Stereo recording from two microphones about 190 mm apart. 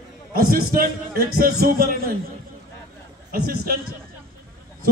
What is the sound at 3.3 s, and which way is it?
Speech, 55° right (ahead or behind).